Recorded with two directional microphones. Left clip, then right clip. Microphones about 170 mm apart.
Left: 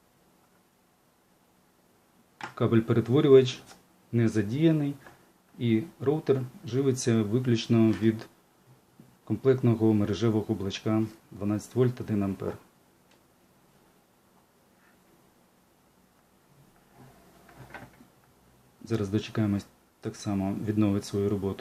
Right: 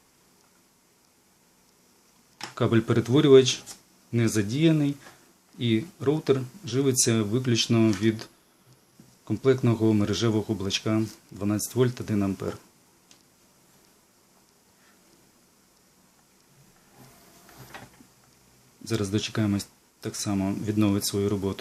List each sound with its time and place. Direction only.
2.6 s speech: 20° right (ahead or behind)
18.9 s speech: 15° right (ahead or behind)